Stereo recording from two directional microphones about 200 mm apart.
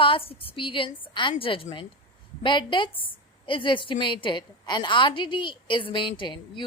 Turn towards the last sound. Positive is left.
turn(degrees=25)  # may be behind; listen again after turning